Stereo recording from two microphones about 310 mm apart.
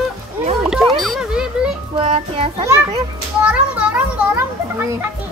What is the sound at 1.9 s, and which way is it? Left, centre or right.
Child singing, centre.